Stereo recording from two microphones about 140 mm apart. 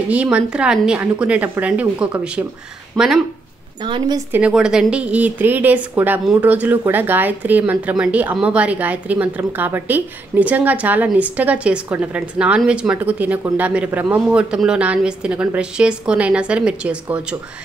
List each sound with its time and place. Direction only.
0.1 s a woman's voice: 10° right (ahead or behind)
2.9 s speech: 5° left (ahead or behind)
3.8 s a woman's voice: 35° right (ahead or behind)
4.3 s a woman's voice: 10° right (ahead or behind)